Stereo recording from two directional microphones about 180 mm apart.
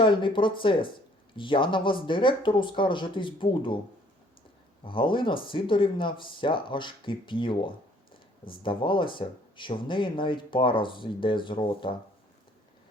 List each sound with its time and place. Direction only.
0.0 s speech: 25° left (ahead or behind)
4.9 s speech: 30° left (ahead or behind)